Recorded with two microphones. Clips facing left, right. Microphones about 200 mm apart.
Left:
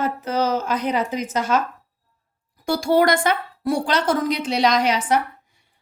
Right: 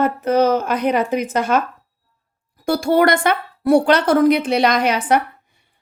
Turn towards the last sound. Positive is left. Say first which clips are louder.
# right 2 dB
turn(degrees=-60)  # may be behind; listen again after turning